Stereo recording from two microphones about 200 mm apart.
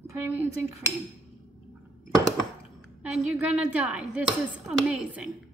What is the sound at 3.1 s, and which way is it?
Speech, 5° right (ahead or behind).